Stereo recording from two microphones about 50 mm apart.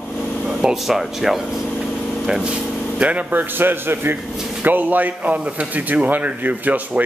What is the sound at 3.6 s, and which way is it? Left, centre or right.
A man's voice, right.